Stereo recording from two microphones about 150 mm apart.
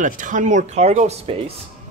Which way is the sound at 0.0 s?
60° right (ahead or behind).